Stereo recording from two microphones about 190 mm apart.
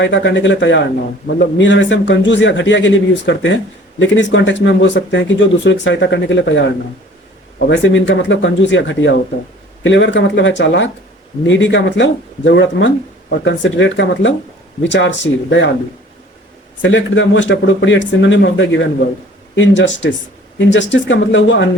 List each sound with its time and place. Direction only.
0.0 s speech: 70° left (ahead or behind)
16.8 s speech: 75° left (ahead or behind)